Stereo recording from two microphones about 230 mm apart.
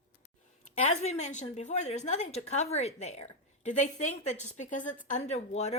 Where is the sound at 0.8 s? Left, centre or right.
Left.